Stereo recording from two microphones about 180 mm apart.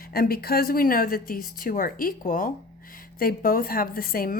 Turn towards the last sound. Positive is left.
turn(degrees=55)  # may be behind; listen again after turning